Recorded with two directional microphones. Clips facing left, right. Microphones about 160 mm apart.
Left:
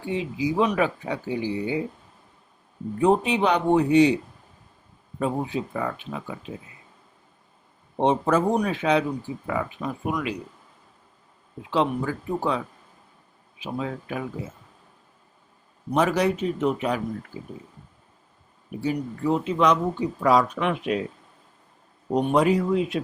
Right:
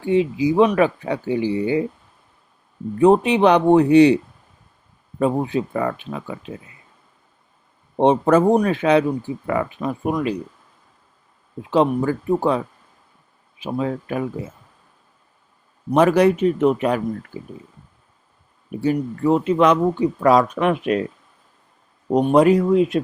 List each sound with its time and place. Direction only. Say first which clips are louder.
0.1 s speech: right 8 dB; 60° right (ahead or behind)
3.0 s speech: right 7 dB; 65° right (ahead or behind)
5.2 s speech: right 6 dB; 60° right (ahead or behind)
7.9 s speech: right 6 dB; 60° right (ahead or behind)
10.0 s speech: right 6 dB; 35° right (ahead or behind)
11.7 s speech: right 6 dB; 45° right (ahead or behind)
16.0 s speech: right 7 dB; 60° right (ahead or behind)
18.8 s speech: right 6 dB; 55° right (ahead or behind)
22.1 s speech: right 6 dB; 45° right (ahead or behind)